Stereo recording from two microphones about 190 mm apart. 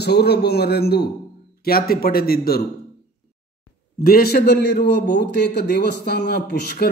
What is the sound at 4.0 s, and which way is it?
A man's voice, 55° left (ahead or behind).